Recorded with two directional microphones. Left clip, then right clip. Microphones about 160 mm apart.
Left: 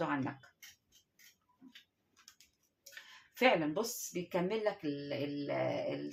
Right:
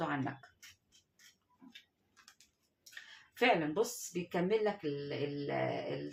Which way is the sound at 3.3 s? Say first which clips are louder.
Even; 30° left (ahead or behind).